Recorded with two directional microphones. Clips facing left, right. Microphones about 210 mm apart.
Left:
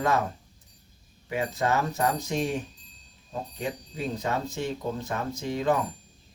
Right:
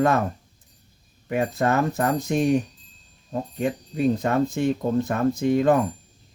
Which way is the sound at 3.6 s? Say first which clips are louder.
Right 10 dB; 55° right (ahead or behind).